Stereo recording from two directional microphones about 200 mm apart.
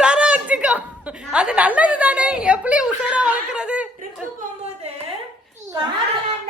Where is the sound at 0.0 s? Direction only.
5° right (ahead or behind).